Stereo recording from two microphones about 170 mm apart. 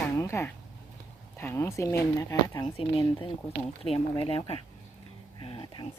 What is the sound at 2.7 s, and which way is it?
Speech, 30° left (ahead or behind).